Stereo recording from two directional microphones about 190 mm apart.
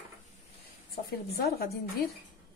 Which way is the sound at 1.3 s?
55° left (ahead or behind).